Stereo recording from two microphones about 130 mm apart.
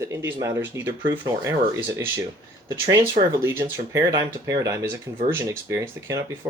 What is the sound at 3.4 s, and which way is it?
Speech, 15° right (ahead or behind).